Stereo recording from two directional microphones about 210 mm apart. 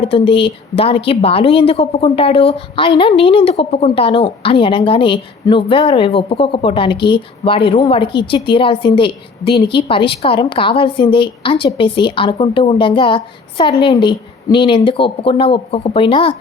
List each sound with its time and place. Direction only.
0.0 s speech: 25° left (ahead or behind)